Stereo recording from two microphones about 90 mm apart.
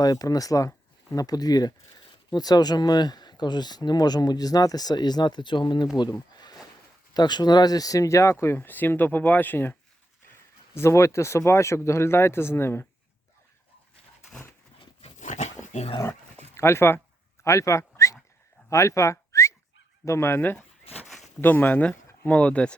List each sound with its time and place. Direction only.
0.0 s speech: 45° left (ahead or behind)
6.0 s a sound: 50° left (ahead or behind)
7.1 s speech: 50° left (ahead or behind); by 9.7 s 20° left (ahead or behind)
10.8 s speech: 35° left (ahead or behind)
16.6 s speech: 30° left (ahead or behind)
17.4 s dog: 35° left (ahead or behind)
18.7 s whistling: 35° left (ahead or behind)
20.1 s speech: 30° left (ahead or behind)
21.1 s zipper: centre (ahead or behind)
21.4 s speech: 20° left (ahead or behind)